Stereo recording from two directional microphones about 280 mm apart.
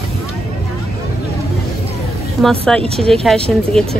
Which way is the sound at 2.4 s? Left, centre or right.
Centre.